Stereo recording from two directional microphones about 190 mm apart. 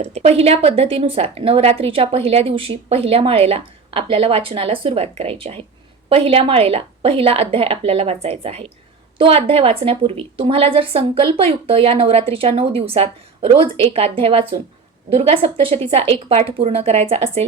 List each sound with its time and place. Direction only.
0.0 s a woman's voice: 35° right (ahead or behind)